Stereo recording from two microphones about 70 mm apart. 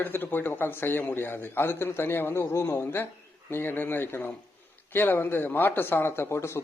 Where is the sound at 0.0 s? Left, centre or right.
Left.